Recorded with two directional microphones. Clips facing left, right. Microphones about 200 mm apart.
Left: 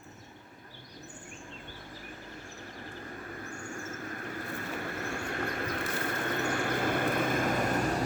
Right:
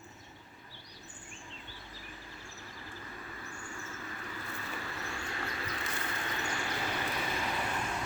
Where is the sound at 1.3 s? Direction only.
50° left (ahead or behind).